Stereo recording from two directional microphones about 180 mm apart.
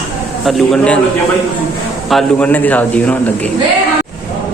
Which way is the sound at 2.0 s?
5° left (ahead or behind).